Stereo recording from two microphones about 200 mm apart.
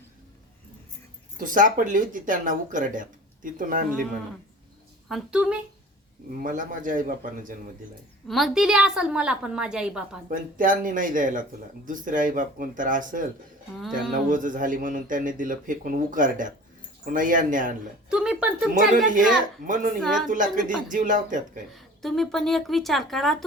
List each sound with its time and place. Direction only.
1.4 s a man's voice: 40° right (ahead or behind)
5.0 s a woman's voice: centre (ahead or behind)
6.4 s speech: 40° right (ahead or behind)
8.3 s a woman's voice: centre (ahead or behind)
10.2 s a man's voice: 45° right (ahead or behind)
18.1 s a sound: 5° right (ahead or behind)
18.7 s a man's voice: 40° right (ahead or behind)
21.8 s a woman's voice: centre (ahead or behind)